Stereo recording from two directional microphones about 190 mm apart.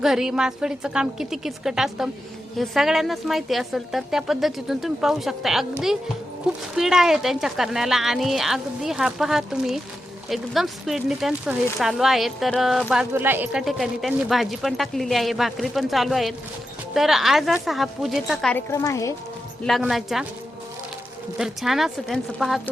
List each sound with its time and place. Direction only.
0.0 s speech: centre (ahead or behind)
6.7 s speech: centre (ahead or behind)
18.5 s a woman's voice: 15° left (ahead or behind)
19.6 s speech: centre (ahead or behind)
21.3 s speech: centre (ahead or behind)